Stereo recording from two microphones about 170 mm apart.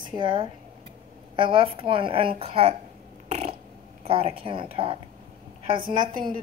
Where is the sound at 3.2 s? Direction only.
40° right (ahead or behind).